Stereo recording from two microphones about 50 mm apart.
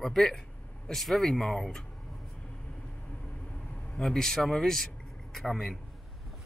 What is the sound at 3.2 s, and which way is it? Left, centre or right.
Vehicle, left.